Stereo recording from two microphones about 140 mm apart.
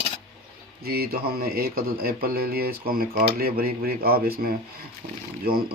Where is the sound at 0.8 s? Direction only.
90° right.